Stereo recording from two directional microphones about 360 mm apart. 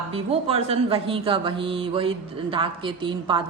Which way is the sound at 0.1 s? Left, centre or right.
Centre.